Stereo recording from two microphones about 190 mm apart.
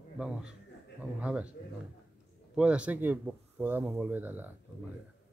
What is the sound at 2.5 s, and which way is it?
Speech, 5° right (ahead or behind).